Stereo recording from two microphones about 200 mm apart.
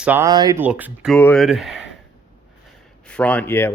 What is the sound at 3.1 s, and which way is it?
Speech, 5° left (ahead or behind).